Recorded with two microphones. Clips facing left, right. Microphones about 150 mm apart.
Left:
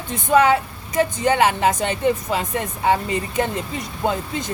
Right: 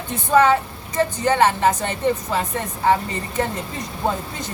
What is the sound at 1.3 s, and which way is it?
A woman's voice, 15° left (ahead or behind).